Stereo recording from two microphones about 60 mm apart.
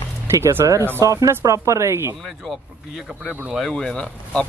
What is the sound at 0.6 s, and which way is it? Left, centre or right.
Speech, right.